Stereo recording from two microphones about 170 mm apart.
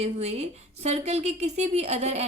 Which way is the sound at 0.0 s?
40° right (ahead or behind).